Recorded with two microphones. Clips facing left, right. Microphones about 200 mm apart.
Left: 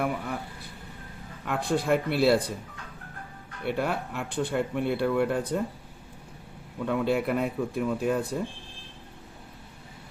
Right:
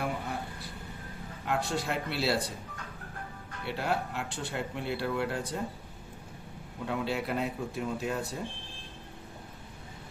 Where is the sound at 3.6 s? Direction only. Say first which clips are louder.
Left 4 dB; 55° left (ahead or behind).